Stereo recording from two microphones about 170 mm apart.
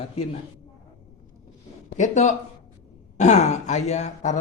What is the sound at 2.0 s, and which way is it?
Speech, 45° left (ahead or behind).